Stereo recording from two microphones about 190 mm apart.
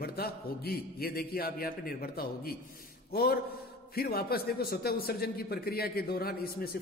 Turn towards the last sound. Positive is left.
turn(degrees=55)  # may be behind; listen again after turning